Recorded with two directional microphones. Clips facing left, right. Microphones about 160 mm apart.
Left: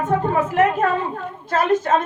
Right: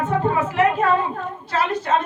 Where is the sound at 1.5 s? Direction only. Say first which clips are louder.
Left 4 dB; 45° left (ahead or behind).